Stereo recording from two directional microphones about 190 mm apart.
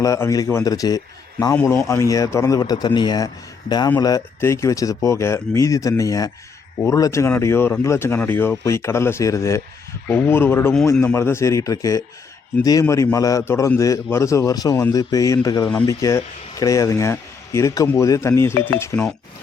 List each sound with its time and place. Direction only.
0.0 s a man's voice: 15° left (ahead or behind)